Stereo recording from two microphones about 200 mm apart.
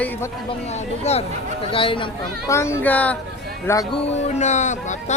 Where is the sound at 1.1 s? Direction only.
35° left (ahead or behind).